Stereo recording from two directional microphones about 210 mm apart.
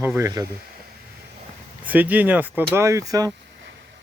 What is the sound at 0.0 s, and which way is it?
Speech, 10° right (ahead or behind).